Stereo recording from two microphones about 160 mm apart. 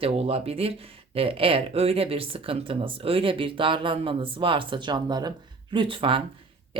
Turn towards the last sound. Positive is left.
turn(degrees=-35)  # may be behind; listen again after turning